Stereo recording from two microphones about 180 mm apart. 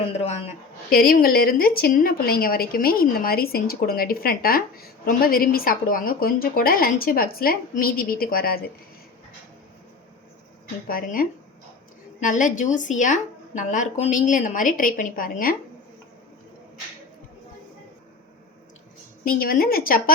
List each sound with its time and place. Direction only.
0.0 s a woman's voice: 30° left (ahead or behind)
0.9 s a woman's voice: 55° left (ahead or behind)
10.8 s a woman's voice: 50° left (ahead or behind)
19.2 s a woman's voice: 55° left (ahead or behind)